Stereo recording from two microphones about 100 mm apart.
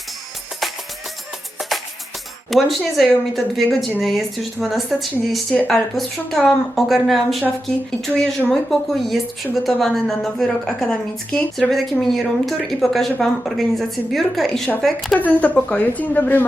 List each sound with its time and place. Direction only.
2.5 s a woman's voice: centre (ahead or behind)
15.2 s a woman's voice: 15° left (ahead or behind)